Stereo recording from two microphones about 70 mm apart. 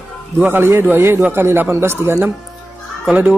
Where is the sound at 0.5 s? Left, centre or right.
Right.